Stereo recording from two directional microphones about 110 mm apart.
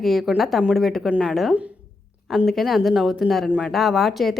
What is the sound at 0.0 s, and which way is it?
Speech, centre (ahead or behind).